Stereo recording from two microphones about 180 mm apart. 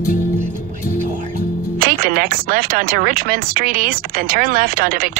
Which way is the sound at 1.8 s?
50° right (ahead or behind).